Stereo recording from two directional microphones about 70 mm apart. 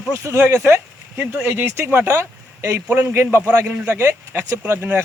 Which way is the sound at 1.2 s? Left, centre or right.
Right.